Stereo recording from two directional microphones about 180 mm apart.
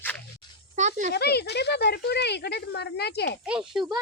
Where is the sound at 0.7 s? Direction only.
40° right (ahead or behind).